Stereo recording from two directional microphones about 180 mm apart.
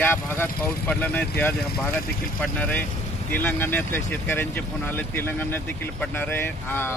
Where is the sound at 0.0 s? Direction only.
10° left (ahead or behind).